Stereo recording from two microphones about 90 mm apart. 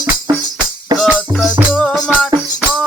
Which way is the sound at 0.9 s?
Centre (ahead or behind).